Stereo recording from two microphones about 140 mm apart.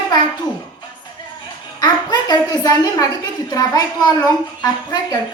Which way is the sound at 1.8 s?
30° left (ahead or behind).